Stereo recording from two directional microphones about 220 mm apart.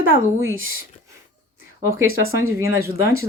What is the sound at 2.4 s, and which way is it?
Speech, 10° right (ahead or behind).